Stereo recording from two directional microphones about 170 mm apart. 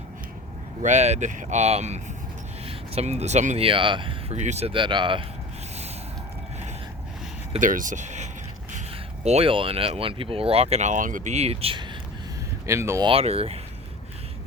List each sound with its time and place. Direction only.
0.8 s speech: 45° right (ahead or behind)
4.4 s speech: 40° right (ahead or behind)
7.6 s speech: 50° right (ahead or behind); by 11.9 s 30° right (ahead or behind)
12.6 s speech: 15° right (ahead or behind)
13.1 s speech: 35° right (ahead or behind)